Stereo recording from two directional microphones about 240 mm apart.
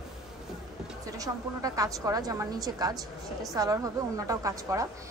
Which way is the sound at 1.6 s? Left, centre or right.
Centre.